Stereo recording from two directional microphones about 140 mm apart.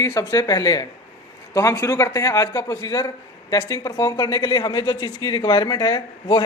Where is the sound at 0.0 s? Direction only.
25° left (ahead or behind).